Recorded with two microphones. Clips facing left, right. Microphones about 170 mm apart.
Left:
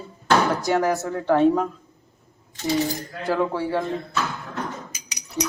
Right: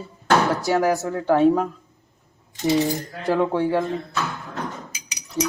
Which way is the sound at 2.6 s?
20° right (ahead or behind).